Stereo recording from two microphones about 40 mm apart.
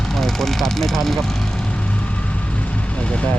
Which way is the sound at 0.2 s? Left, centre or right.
Centre.